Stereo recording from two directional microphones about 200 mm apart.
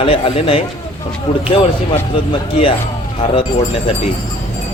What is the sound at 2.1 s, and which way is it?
Speech, 25° left (ahead or behind).